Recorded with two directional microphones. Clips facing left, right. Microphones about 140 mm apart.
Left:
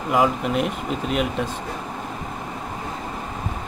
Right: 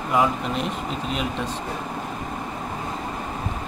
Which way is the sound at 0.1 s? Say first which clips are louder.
Left 2 dB; 5° left (ahead or behind).